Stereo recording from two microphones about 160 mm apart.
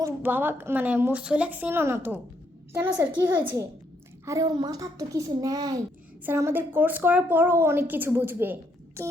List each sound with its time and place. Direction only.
0.0 s a woman's voice: 10° right (ahead or behind)